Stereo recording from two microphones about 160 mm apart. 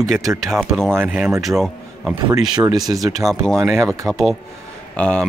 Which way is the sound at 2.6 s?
25° right (ahead or behind).